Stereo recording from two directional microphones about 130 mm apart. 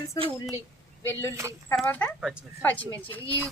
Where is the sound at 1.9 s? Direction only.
15° left (ahead or behind).